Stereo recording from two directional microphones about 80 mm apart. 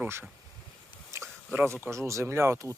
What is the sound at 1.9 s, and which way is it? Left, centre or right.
Speech, right.